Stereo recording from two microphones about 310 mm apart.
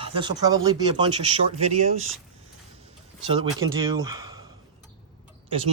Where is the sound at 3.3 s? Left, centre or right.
Centre.